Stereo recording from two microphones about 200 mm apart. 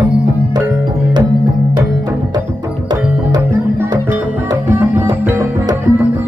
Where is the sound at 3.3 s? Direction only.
10° right (ahead or behind).